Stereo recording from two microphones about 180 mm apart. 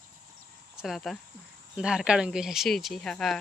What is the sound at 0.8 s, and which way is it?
Speech, centre (ahead or behind).